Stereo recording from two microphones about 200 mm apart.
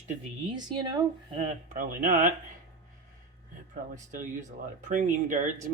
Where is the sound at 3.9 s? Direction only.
40° right (ahead or behind).